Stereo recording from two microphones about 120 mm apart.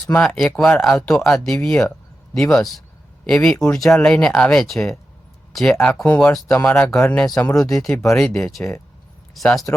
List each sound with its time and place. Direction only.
0.2 s speech: 5° left (ahead or behind)
7.9 s speech: 20° left (ahead or behind)
8.1 s speech: 5° left (ahead or behind)